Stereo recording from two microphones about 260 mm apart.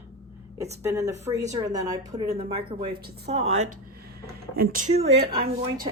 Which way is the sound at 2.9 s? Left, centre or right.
Right.